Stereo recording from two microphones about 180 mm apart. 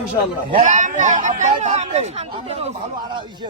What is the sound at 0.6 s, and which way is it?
Speech, 45° right (ahead or behind).